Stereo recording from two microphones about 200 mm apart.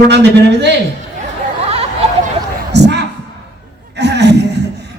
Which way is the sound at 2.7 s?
55° right (ahead or behind).